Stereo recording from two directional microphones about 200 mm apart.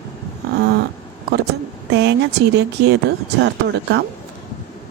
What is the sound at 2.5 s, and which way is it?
Speech, 55° right (ahead or behind).